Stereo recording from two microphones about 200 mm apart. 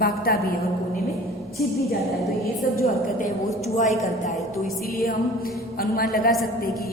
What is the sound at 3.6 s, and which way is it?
A woman's voice, 40° left (ahead or behind).